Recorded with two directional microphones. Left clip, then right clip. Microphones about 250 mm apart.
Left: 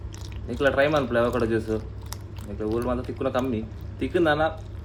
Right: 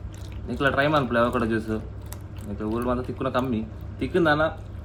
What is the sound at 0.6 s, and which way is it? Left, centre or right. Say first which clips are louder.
Speech: left 1 dB; right.